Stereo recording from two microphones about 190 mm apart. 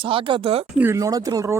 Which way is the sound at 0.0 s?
25° right (ahead or behind).